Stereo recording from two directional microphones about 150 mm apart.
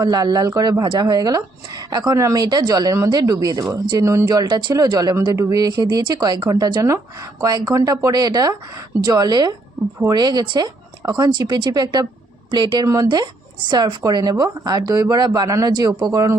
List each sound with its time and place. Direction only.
0.0 s speech: 25° right (ahead or behind)